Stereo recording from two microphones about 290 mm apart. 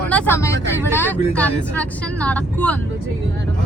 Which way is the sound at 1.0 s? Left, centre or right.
Centre.